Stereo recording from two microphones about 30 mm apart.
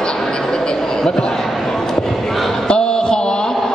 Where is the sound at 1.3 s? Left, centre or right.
Centre.